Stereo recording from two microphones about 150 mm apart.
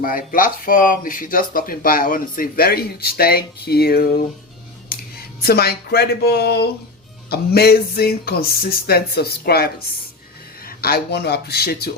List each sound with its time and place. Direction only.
0.0 s speech: 70° left (ahead or behind)
5.4 s speech: 90° left
10.7 s speech: 90° left